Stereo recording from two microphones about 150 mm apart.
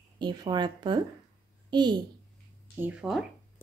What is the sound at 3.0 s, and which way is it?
Speech, 5° right (ahead or behind).